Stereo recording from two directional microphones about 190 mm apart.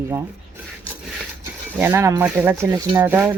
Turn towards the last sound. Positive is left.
turn(degrees=-10)  # may be behind; listen again after turning